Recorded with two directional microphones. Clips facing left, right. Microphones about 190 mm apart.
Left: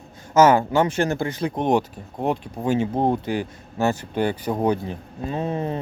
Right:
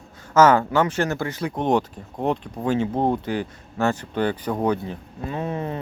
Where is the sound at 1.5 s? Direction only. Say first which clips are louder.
Even; 10° left (ahead or behind).